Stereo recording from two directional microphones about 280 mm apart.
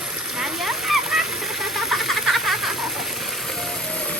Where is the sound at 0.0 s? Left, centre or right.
Centre.